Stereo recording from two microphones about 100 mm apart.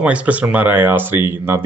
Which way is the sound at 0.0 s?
10° right (ahead or behind).